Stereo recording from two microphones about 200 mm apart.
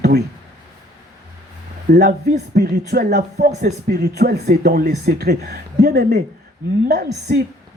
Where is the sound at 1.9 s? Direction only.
55° right (ahead or behind).